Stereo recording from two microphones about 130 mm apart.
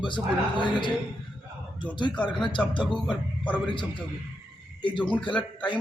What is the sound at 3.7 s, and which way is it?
Speech, 40° left (ahead or behind).